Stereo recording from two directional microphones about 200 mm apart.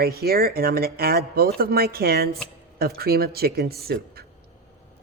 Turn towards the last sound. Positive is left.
turn(degrees=-50)  # may be behind; listen again after turning